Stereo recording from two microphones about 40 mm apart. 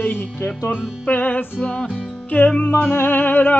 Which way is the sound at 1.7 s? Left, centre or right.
Left.